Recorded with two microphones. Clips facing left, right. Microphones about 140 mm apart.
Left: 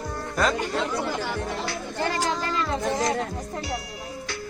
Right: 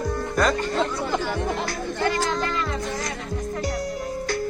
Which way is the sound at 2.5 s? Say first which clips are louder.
Left 2 dB; 30° left (ahead or behind).